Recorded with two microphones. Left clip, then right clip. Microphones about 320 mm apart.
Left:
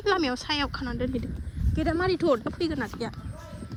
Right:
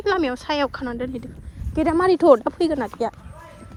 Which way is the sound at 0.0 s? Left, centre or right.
Centre.